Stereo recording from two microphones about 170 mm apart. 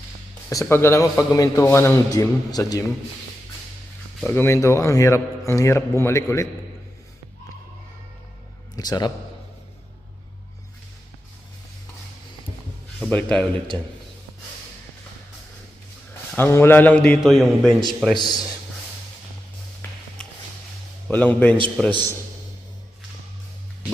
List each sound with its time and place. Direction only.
0.5 s a man's voice: 15° left (ahead or behind)
4.2 s a man's voice: 10° left (ahead or behind)
8.7 s a man's voice: 25° left (ahead or behind)
13.0 s a man's voice: 10° left (ahead or behind)
16.3 s a man's voice: 15° left (ahead or behind)
18.1 s a man's voice: 25° left (ahead or behind)
20.2 s a sound: 5° left (ahead or behind)
21.1 s a man's voice: 10° left (ahead or behind)